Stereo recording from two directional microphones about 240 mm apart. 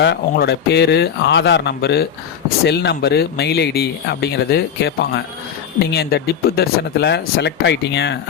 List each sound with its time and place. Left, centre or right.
0.0 s speech: left